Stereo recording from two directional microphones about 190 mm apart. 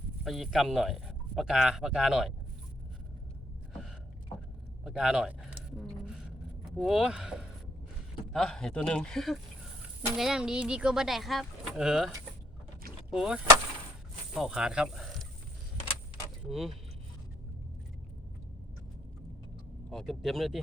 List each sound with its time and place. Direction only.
0.3 s speech: centre (ahead or behind)
4.8 s a sound: 5° right (ahead or behind)
6.7 s speech: centre (ahead or behind)
16.5 s speech: centre (ahead or behind)
19.9 s speech: centre (ahead or behind)